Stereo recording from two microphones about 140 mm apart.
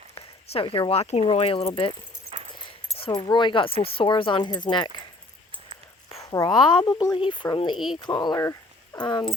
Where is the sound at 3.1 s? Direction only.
30° left (ahead or behind).